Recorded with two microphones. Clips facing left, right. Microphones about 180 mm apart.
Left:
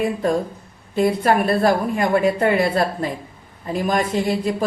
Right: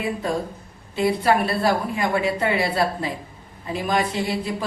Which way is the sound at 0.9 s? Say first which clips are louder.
Left 2 dB; 50° left (ahead or behind).